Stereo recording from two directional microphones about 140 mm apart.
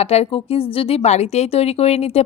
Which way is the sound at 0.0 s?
50° left (ahead or behind).